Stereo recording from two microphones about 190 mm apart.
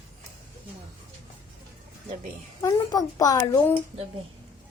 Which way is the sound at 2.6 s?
20° left (ahead or behind).